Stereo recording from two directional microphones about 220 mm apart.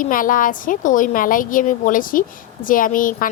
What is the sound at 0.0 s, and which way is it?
Speech, 40° left (ahead or behind).